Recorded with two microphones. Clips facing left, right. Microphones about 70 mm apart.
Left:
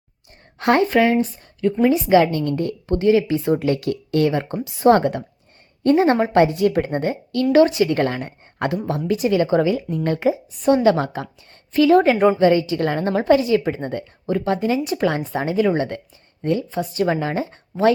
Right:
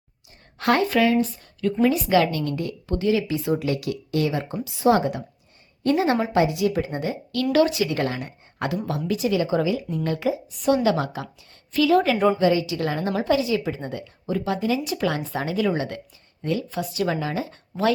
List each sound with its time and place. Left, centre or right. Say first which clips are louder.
0.6 s a woman's voice: left 4 dB; left
5.8 s a woman's voice: left 5 dB; left
6.3 s speech: left 5 dB; left
7.5 s a woman's voice: left 5 dB; left